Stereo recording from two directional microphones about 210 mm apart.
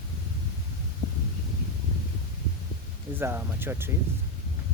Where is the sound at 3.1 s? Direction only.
10° right (ahead or behind).